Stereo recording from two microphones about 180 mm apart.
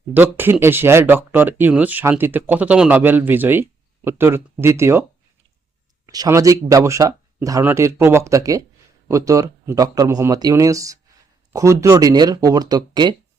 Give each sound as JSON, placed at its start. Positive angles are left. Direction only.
{"t": 0.1, "sound": "speech", "side_deg": -10}
{"t": 6.1, "sound": "speech", "side_deg": -20}